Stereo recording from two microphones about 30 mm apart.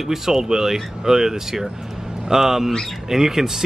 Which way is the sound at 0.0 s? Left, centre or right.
Centre.